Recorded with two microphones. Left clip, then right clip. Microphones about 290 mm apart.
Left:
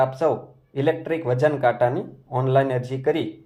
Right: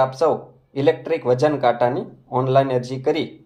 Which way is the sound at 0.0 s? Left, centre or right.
Left.